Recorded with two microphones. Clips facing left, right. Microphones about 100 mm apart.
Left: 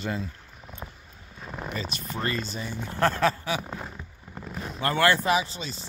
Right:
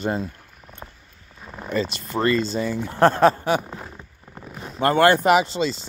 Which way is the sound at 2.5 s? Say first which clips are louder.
Right 10 dB; 90° right.